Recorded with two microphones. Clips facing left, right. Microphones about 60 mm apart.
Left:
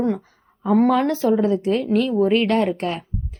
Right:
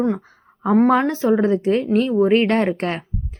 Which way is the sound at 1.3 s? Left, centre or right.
Right.